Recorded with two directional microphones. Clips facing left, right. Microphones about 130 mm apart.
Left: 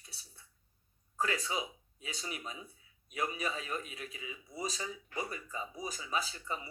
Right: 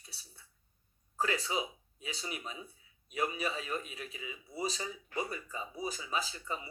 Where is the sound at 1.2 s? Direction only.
30° right (ahead or behind).